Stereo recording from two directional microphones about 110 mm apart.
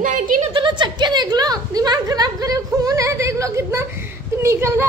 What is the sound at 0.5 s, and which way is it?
A woman's voice, 45° right (ahead or behind).